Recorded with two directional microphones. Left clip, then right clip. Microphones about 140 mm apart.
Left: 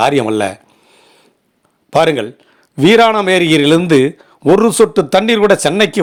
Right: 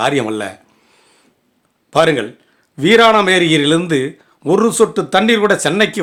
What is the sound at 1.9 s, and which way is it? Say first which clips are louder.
Speech: left 1 dB; 45° left (ahead or behind).